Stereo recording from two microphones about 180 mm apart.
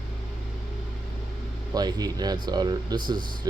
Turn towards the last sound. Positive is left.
turn(degrees=-25)  # may be behind; listen again after turning